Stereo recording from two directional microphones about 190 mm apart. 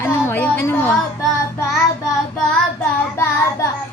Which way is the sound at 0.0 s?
10° left (ahead or behind).